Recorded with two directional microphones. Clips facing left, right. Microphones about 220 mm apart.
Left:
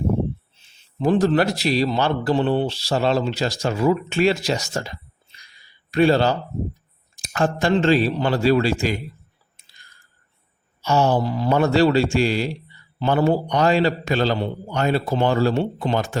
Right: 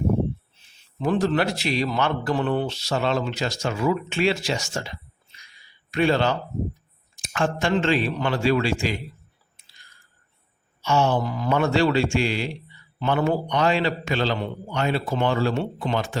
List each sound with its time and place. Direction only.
1.0 s speech: 35° left (ahead or behind)
10.8 s speech: 40° left (ahead or behind)